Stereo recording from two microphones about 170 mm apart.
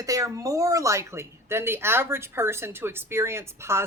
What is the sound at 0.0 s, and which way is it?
Speech, 20° right (ahead or behind).